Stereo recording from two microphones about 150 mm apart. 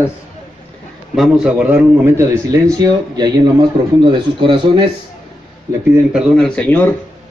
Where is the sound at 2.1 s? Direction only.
20° right (ahead or behind).